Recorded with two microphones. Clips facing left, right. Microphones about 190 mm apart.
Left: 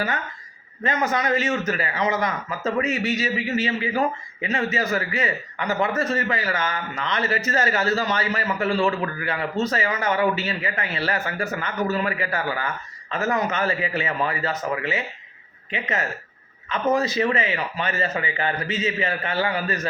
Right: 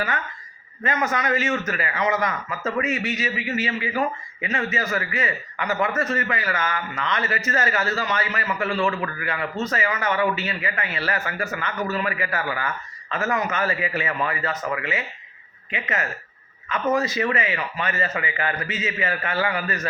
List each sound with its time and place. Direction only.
0.9 s a man's voice: 35° left (ahead or behind)